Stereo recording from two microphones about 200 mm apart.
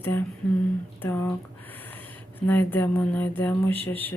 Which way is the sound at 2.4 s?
10° left (ahead or behind).